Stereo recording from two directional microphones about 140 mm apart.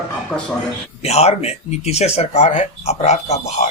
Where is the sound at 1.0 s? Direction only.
50° left (ahead or behind).